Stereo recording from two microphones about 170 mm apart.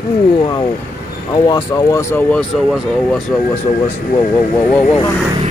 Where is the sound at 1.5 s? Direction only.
15° left (ahead or behind).